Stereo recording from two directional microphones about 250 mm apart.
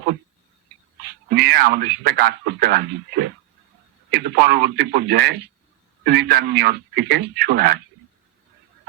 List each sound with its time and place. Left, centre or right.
1.3 s speech: right